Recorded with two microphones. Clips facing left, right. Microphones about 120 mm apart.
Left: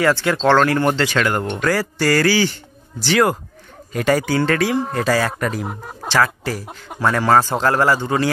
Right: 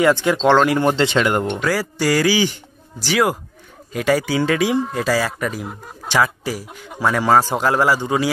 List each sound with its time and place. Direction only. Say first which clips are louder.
0.0 s a man's voice: right 1 dB; 15° right (ahead or behind)
1.6 s a man's voice: left 1 dB; 10° right (ahead or behind)
6.0 s a man's voice: even; 15° right (ahead or behind)